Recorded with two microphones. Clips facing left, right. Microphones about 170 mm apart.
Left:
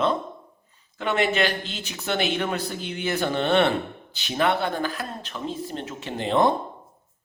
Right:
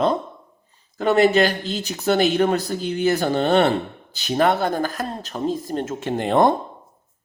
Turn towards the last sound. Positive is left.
turn(degrees=-50)  # may be behind; listen again after turning